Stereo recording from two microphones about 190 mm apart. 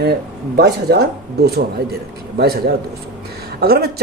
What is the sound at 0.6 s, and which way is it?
Speech, 55° right (ahead or behind).